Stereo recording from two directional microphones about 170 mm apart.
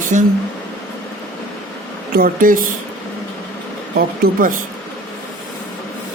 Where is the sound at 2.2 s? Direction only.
55° right (ahead or behind).